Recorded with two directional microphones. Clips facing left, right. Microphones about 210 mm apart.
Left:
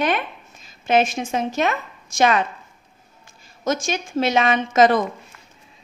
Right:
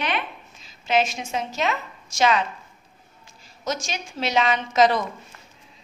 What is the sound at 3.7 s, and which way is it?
A woman's voice, 50° left (ahead or behind).